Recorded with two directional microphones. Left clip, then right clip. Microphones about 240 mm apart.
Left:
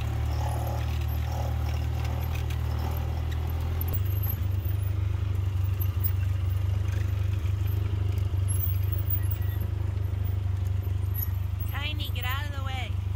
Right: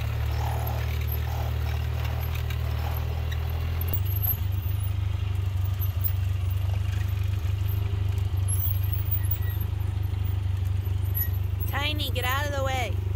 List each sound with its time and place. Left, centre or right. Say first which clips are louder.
11.7 s vehicle: right 6 dB; right